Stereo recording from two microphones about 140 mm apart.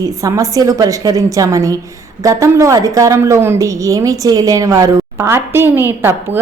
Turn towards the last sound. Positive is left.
turn(degrees=-15)  # may be behind; listen again after turning